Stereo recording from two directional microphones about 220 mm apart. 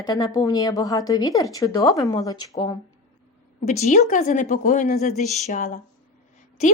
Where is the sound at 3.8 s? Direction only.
30° left (ahead or behind).